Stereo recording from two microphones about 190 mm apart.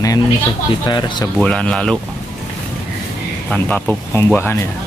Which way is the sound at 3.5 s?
10° left (ahead or behind).